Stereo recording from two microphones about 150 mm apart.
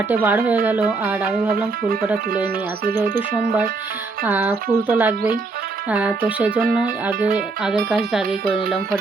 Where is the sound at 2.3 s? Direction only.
80° right.